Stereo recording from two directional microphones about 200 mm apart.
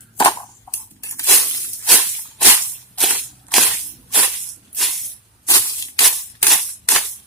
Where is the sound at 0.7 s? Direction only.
15° left (ahead or behind).